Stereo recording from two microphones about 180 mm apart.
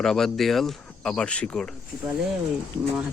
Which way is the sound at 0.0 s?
5° left (ahead or behind).